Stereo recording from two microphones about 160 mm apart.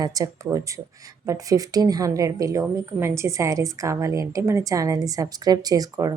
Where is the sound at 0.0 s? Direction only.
25° right (ahead or behind).